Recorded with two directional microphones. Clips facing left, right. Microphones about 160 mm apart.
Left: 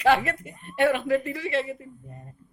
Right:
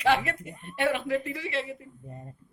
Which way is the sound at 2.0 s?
25° right (ahead or behind).